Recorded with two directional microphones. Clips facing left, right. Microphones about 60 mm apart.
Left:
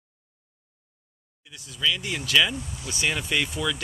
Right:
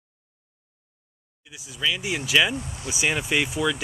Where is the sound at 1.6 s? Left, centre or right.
Centre.